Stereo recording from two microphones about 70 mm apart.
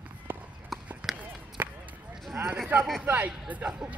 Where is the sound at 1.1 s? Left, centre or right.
Right.